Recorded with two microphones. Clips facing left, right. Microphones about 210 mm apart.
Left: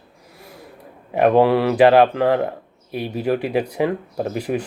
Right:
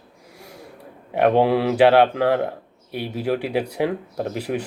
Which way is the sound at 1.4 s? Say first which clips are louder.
Left 2 dB; 90° left.